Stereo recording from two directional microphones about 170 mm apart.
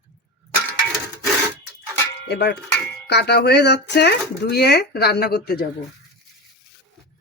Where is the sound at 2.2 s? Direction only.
85° left; by 5.6 s 65° left (ahead or behind).